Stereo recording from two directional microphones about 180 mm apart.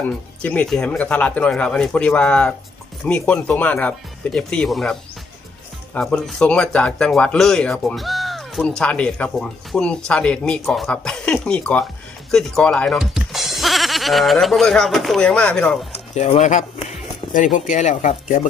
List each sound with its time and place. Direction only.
0.4 s a man's voice: 5° left (ahead or behind)
15.9 s speech: 35° left (ahead or behind)